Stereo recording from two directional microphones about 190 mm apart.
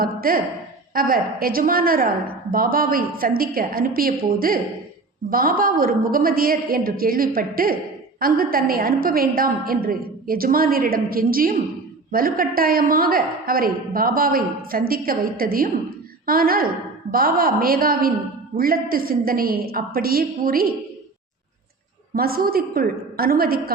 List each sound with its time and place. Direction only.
0.0 s a woman's voice: 50° right (ahead or behind)
22.1 s a woman's voice: 50° right (ahead or behind)